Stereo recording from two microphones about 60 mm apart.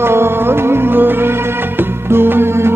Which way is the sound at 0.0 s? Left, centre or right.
Right.